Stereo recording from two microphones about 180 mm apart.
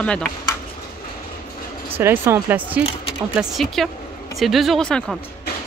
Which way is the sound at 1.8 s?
10° right (ahead or behind).